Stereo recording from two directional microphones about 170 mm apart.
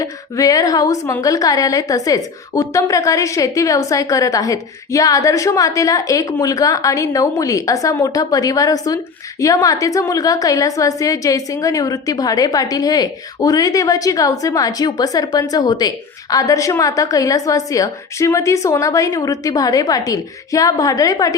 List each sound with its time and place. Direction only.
0.0 s a woman's voice: 20° left (ahead or behind)